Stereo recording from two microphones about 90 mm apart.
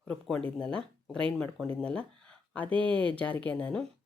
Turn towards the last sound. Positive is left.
turn(degrees=15)  # may be behind; listen again after turning